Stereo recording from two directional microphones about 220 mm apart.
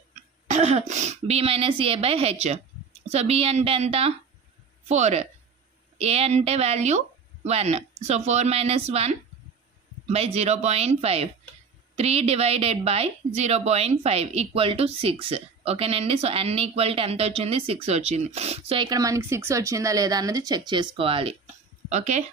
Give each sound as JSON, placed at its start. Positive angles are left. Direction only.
{"t": 0.5, "sound": "a woman's voice", "side_deg": -30}